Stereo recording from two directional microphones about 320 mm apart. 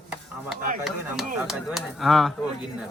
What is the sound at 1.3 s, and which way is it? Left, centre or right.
Speech, centre.